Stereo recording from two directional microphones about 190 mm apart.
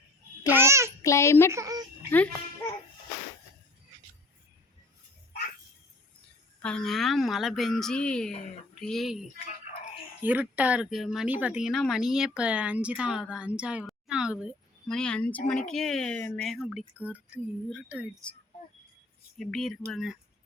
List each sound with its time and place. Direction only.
0.4 s a child's voice: 10° right (ahead or behind)
1.0 s a child's voice: 15° left (ahead or behind)
1.5 s a sound: 20° right (ahead or behind)
2.0 s speech: 10° left (ahead or behind)
6.6 s speech: 5° left (ahead or behind)
9.5 s a sound: 40° left (ahead or behind)
10.2 s speech: 10° right (ahead or behind)
19.4 s speech: centre (ahead or behind)